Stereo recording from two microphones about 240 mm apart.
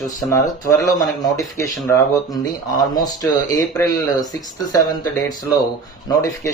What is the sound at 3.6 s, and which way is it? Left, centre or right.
Speech, centre.